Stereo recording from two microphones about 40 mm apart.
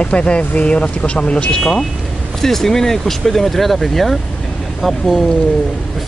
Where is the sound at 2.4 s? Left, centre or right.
Centre.